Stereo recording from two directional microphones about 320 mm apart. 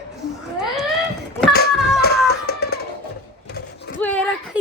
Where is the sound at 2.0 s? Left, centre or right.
Left.